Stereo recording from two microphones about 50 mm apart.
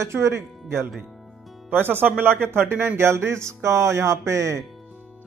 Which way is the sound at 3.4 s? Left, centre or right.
Right.